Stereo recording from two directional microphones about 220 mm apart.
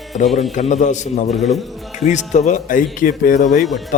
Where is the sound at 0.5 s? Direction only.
35° left (ahead or behind).